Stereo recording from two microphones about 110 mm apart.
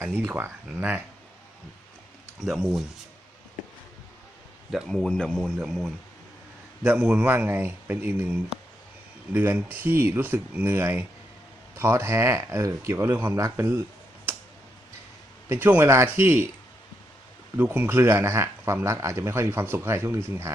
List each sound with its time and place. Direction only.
0.0 s speech: 20° right (ahead or behind)
2.4 s speech: centre (ahead or behind)
4.7 s speech: 5° left (ahead or behind)
5.5 s a man's voice: 5° right (ahead or behind); by 13.8 s 25° right (ahead or behind)
15.4 s a man's voice: 20° right (ahead or behind)
17.6 s a man's voice: 20° right (ahead or behind)